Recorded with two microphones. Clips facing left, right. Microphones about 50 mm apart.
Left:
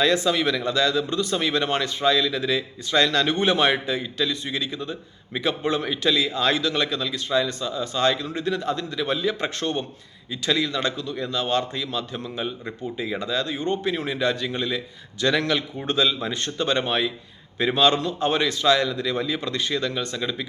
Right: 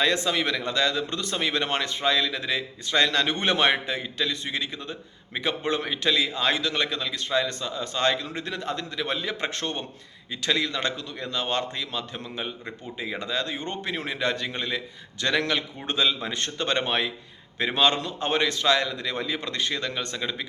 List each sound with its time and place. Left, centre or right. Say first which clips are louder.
0.0 s a man's voice: left 3 dB; right
3.4 s a man's voice: left 1 dB; right
16.3 s a man's voice: left 3 dB; right
17.7 s a man's voice: left 3 dB; right